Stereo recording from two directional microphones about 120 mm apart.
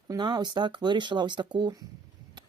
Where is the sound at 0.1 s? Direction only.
35° right (ahead or behind).